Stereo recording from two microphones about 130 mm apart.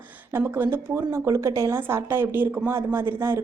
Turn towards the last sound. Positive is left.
turn(degrees=-20)  # may be behind; listen again after turning